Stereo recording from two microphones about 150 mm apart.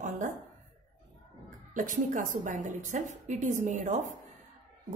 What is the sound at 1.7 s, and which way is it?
A woman's voice, 60° right (ahead or behind).